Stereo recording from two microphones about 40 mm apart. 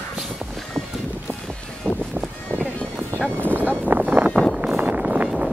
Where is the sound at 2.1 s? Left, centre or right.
Right.